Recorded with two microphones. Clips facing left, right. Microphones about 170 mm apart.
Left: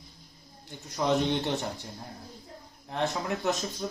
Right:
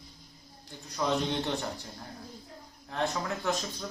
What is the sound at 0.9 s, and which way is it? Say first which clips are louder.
Speech: left 3 dB; 20° left (ahead or behind).